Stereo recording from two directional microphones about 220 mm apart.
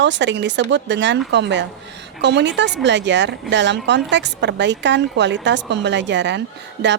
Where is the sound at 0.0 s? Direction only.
55° right (ahead or behind).